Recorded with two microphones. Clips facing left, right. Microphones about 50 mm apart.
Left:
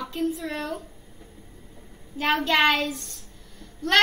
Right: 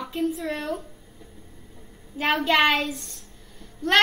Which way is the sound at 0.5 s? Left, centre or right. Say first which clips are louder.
Right 1 dB; centre.